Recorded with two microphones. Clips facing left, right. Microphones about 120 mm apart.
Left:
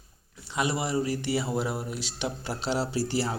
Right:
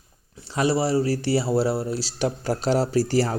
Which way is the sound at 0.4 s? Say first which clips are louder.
Right 7 dB; 35° right (ahead or behind).